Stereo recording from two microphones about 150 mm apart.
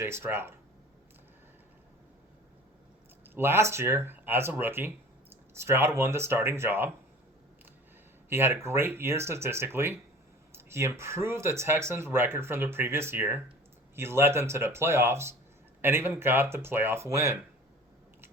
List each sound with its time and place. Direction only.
0.0 s speech: 15° right (ahead or behind)
3.3 s speech: 15° right (ahead or behind)
8.3 s speech: 15° right (ahead or behind)